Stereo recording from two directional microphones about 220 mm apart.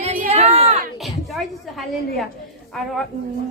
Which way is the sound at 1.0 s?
Centre (ahead or behind).